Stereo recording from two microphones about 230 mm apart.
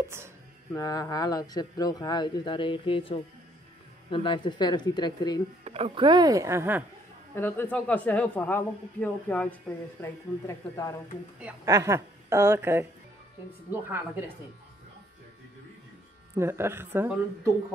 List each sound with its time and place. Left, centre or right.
0.7 s speech: centre
5.6 s a woman's voice: right
7.3 s speech: centre
11.3 s a woman's voice: centre
16.3 s a woman's voice: centre